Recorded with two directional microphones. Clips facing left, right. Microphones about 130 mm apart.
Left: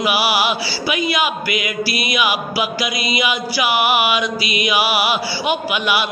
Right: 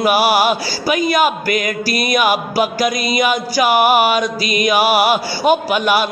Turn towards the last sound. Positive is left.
turn(degrees=-40)  # may be behind; listen again after turning